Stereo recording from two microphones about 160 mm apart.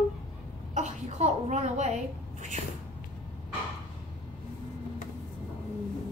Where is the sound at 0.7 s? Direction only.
45° right (ahead or behind).